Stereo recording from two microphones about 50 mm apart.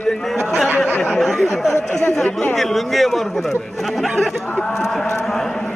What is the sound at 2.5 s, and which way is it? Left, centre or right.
Speech, centre.